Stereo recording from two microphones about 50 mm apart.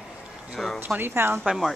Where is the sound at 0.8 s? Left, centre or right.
Right.